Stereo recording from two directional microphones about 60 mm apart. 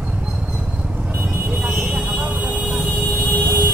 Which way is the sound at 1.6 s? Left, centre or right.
Right.